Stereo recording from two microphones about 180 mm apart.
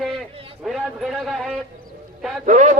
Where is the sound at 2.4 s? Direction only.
45° right (ahead or behind).